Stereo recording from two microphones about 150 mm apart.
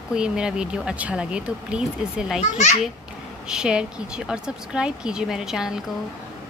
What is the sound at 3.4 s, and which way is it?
Speech, 5° right (ahead or behind).